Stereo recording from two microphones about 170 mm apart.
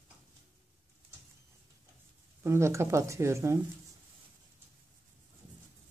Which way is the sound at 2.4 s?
15° right (ahead or behind).